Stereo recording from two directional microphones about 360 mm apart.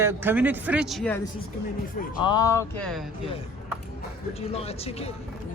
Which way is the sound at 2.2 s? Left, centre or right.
Centre.